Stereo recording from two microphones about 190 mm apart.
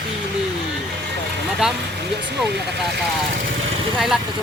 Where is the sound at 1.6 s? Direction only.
5° right (ahead or behind).